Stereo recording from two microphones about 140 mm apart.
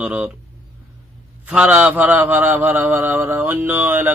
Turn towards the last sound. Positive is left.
turn(degrees=-15)  # may be behind; listen again after turning